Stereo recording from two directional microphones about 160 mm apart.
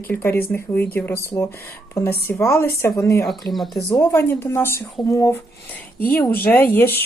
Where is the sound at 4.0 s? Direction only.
15° left (ahead or behind).